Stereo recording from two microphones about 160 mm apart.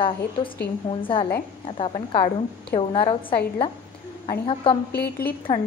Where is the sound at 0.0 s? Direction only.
30° left (ahead or behind).